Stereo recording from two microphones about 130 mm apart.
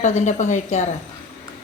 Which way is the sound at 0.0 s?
70° left (ahead or behind).